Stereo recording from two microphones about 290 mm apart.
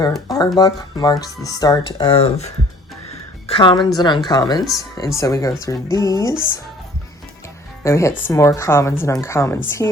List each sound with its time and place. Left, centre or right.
0.3 s a woman's voice: centre
7.9 s speech: centre